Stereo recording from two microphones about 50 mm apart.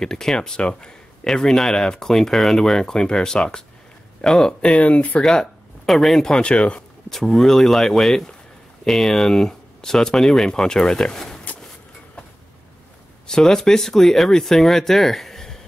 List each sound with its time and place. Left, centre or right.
0.0 s speech: centre; by 5.2 s left
5.2 s speech: centre
6.4 s speech: left
7.1 s speech: centre
13.3 s speech: centre